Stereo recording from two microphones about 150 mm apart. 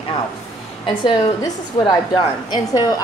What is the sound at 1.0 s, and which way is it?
A woman's voice, 30° left (ahead or behind).